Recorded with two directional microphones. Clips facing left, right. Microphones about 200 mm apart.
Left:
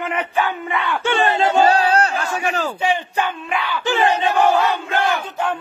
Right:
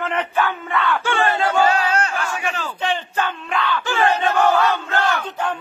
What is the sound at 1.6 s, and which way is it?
Battle cry, 35° left (ahead or behind).